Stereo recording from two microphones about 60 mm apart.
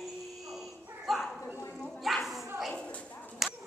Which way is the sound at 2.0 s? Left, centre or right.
Centre.